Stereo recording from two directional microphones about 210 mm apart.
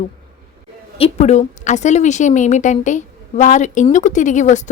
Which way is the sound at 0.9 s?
30° left (ahead or behind).